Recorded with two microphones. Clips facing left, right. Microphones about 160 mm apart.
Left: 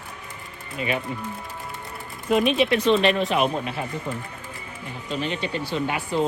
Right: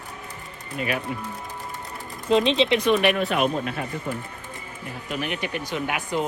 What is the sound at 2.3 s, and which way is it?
Speech, 25° right (ahead or behind).